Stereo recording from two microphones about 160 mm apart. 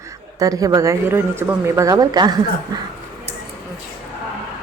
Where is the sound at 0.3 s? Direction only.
20° right (ahead or behind).